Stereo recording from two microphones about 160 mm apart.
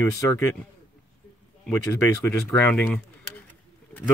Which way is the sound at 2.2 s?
10° left (ahead or behind).